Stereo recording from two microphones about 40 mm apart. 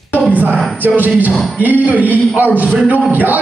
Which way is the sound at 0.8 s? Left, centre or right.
Right.